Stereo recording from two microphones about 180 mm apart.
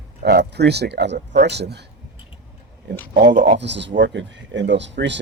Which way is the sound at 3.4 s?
75° right (ahead or behind).